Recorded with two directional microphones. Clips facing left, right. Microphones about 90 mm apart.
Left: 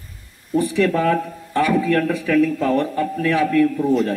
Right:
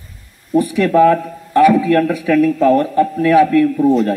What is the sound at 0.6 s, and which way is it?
A man's voice, 10° right (ahead or behind).